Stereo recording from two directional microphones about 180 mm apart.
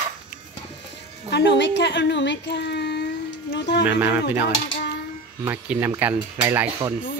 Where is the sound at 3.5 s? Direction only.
70° left (ahead or behind).